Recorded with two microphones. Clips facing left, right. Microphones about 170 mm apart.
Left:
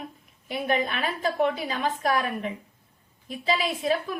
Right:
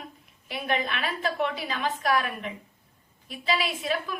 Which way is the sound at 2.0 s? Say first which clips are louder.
Even; 25° left (ahead or behind).